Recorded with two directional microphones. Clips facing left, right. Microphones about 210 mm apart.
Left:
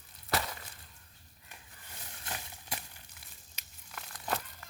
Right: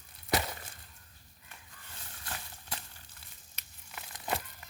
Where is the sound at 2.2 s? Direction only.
15° left (ahead or behind).